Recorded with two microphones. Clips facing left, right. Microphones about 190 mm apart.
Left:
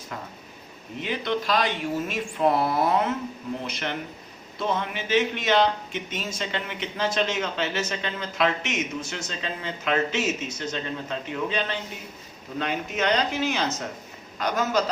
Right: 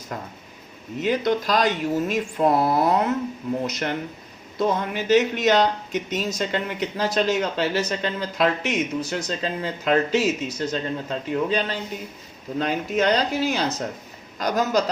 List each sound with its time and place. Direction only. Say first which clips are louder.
0.1 s speech: right 4 dB; 45° right (ahead or behind)